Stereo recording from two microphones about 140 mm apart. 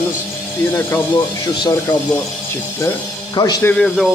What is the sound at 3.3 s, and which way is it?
Speech, 30° left (ahead or behind).